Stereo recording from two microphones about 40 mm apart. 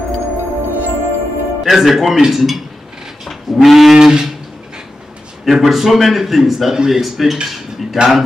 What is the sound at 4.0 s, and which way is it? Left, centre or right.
Speech, centre.